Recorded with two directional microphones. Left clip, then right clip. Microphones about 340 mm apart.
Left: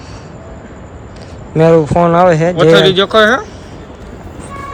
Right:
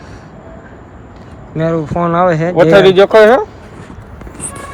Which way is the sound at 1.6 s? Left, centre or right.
Centre.